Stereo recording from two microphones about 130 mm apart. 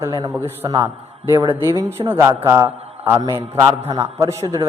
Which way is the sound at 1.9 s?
15° right (ahead or behind).